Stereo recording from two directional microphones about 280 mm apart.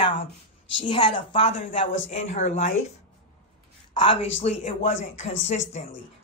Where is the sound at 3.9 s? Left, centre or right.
Centre.